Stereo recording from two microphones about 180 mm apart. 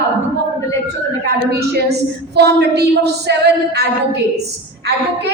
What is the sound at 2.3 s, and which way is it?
Speech, 65° right (ahead or behind).